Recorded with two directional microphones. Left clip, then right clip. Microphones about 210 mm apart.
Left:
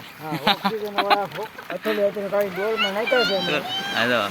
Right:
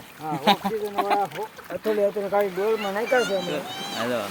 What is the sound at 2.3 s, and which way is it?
Speech, 30° right (ahead or behind).